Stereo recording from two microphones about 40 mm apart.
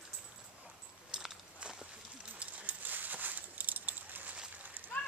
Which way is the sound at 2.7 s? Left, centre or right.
Right.